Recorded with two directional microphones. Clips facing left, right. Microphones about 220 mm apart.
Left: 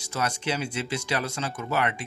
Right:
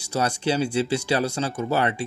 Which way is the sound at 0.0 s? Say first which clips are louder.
Right 5 dB; 30° right (ahead or behind).